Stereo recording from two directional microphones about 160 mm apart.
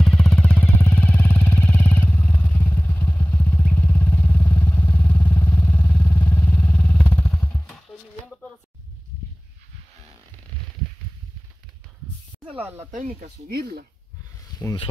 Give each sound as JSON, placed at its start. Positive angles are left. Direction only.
{"t": 0.0, "sound": "a sound", "side_deg": 5}
{"t": 12.5, "sound": "speech", "side_deg": -15}
{"t": 12.9, "sound": "speech", "side_deg": -60}